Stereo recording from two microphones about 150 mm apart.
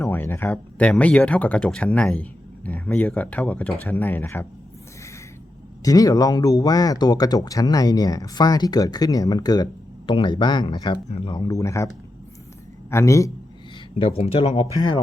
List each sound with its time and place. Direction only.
0.0 s speech: 15° left (ahead or behind)
5.8 s speech: 25° left (ahead or behind)
12.9 s speech: 20° left (ahead or behind)
14.2 s speech: 40° left (ahead or behind)